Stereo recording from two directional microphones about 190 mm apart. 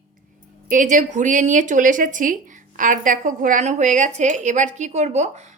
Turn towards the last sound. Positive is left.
turn(degrees=-35)  # may be behind; listen again after turning